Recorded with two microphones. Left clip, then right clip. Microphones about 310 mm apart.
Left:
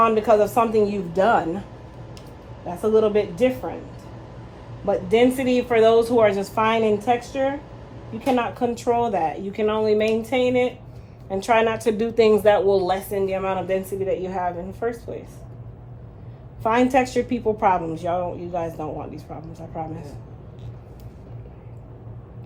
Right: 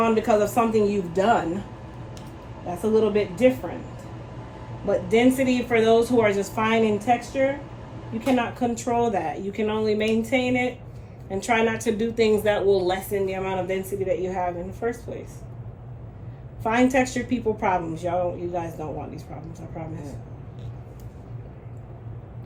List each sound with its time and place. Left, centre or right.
0.0 s a woman's voice: centre
2.9 s a woman's voice: centre
4.9 s a woman's voice: centre
16.6 s a woman's voice: centre